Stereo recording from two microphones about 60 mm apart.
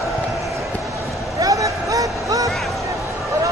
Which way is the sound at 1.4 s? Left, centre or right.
Right.